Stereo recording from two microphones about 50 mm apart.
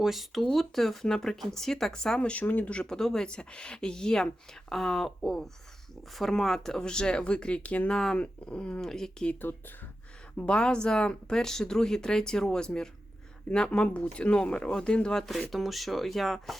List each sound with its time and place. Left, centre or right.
0.0 s speech: centre
2.6 s speech: left
2.8 s speech: centre; by 7.9 s left
7.9 s speech: centre
8.9 s speech: centre
9.4 s speech: left
10.3 s speech: left
15.3 s speech: centre